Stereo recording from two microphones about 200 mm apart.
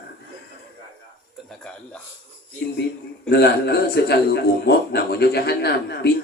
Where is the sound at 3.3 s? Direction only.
55° left (ahead or behind).